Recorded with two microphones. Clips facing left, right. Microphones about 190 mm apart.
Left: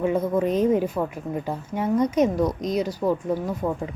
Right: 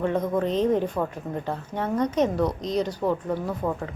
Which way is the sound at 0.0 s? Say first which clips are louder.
Left 2 dB; 10° left (ahead or behind).